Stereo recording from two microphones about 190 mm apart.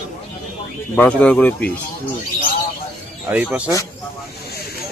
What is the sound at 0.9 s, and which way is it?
Speech, 5° left (ahead or behind).